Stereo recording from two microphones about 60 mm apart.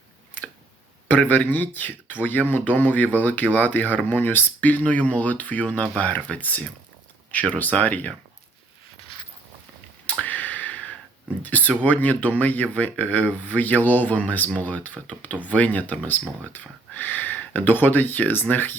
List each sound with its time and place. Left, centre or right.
1.0 s speech: left
10.1 s a sound: left
11.4 s speech: left